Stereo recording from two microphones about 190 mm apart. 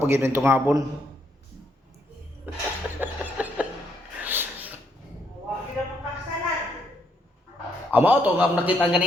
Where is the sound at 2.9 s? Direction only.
10° right (ahead or behind).